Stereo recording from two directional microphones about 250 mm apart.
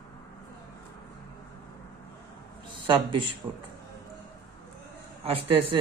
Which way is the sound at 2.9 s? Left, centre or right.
Centre.